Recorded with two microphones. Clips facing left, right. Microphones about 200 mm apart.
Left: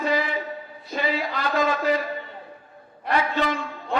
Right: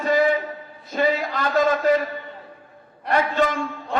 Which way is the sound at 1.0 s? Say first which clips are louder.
Right 4 dB; 45° right (ahead or behind).